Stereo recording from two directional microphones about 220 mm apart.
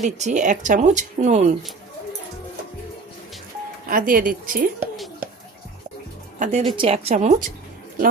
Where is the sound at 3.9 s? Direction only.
40° right (ahead or behind).